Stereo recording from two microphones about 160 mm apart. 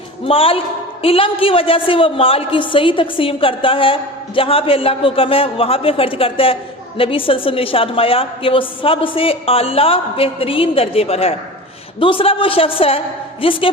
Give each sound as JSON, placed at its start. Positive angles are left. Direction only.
{"t": 0.3, "sound": "a woman's voice", "side_deg": 35}